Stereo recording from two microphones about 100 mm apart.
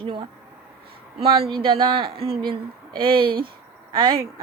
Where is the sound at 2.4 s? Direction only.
55° right (ahead or behind).